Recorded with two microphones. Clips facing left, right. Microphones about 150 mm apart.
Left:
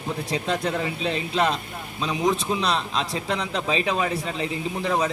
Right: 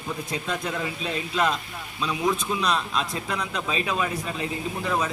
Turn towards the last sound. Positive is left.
turn(degrees=30)  # may be behind; listen again after turning